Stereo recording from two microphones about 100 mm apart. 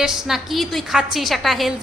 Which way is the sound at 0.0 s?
5° right (ahead or behind).